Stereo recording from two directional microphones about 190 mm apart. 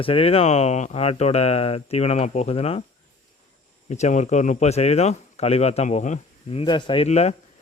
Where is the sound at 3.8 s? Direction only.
35° left (ahead or behind).